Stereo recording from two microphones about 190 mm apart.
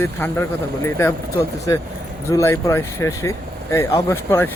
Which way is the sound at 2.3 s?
15° left (ahead or behind).